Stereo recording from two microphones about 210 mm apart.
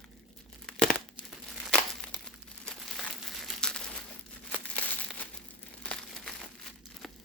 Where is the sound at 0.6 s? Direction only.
5° left (ahead or behind).